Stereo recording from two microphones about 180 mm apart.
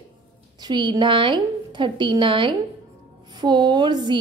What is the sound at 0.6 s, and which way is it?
A woman's voice, 25° right (ahead or behind).